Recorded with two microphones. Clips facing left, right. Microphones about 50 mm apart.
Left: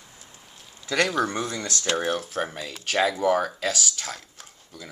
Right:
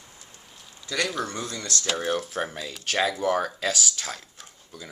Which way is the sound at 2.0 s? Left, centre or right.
Centre.